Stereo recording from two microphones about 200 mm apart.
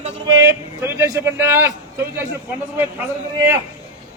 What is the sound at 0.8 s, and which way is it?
Speech, 15° right (ahead or behind).